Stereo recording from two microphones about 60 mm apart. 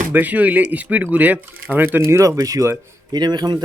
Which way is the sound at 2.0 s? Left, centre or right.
Right.